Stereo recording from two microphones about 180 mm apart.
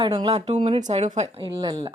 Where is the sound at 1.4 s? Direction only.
25° right (ahead or behind).